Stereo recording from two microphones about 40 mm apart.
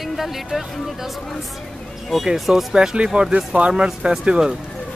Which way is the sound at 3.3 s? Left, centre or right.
Right.